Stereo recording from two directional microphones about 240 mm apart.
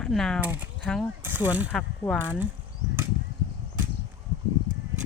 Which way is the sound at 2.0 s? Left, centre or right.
Centre.